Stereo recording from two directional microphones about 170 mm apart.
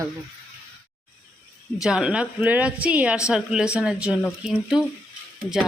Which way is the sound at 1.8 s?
5° right (ahead or behind).